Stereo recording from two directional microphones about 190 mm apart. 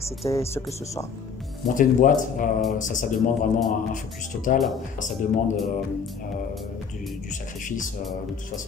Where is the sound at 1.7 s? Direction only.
45° left (ahead or behind).